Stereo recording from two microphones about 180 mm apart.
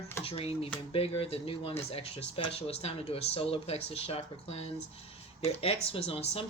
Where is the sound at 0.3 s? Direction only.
35° left (ahead or behind).